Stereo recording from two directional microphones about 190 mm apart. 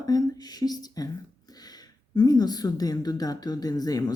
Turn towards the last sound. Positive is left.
turn(degrees=20)  # may be behind; listen again after turning